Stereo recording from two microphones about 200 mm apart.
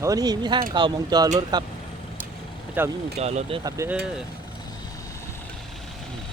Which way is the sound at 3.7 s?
15° right (ahead or behind).